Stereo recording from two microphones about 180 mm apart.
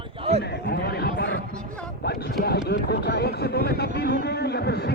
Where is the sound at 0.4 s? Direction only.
65° left (ahead or behind).